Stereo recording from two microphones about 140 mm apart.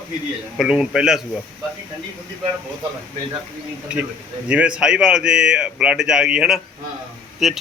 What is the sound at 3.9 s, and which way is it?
A man's voice, 10° right (ahead or behind).